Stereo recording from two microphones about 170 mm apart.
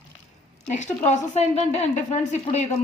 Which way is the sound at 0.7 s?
40° left (ahead or behind).